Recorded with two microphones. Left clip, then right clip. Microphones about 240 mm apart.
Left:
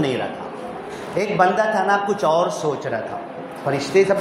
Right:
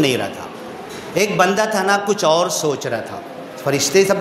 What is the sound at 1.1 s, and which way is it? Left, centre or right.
A man's voice, right.